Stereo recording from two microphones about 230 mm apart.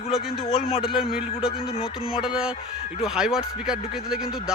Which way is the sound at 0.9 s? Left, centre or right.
Centre.